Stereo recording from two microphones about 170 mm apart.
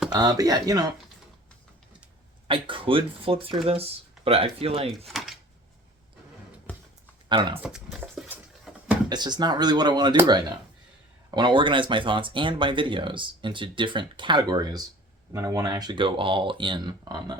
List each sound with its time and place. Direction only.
0.1 s speech: 20° right (ahead or behind)
2.5 s speech: 30° right (ahead or behind)
4.9 s speech: centre (ahead or behind)
7.3 s speech: 30° right (ahead or behind)
7.6 s speech: centre (ahead or behind)
8.3 s a sound: 10° right (ahead or behind)
9.0 s speech: 25° right (ahead or behind)
11.3 s speech: 25° right (ahead or behind)